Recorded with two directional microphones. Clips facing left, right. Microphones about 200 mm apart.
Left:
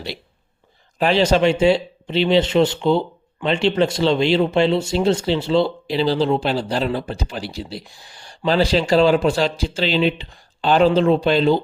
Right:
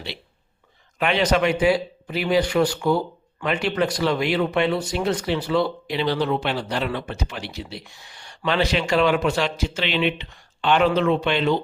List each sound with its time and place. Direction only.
0.9 s speech: 30° left (ahead or behind)